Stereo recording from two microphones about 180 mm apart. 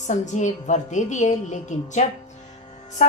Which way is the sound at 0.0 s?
40° left (ahead or behind).